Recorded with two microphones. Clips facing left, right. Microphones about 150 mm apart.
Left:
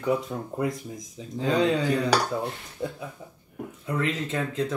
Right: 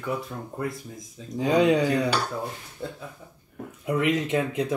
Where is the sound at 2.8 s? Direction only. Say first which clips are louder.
Left 3 dB; 15° left (ahead or behind).